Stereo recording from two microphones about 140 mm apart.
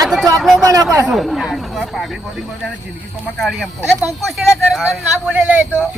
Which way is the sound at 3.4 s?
Centre (ahead or behind).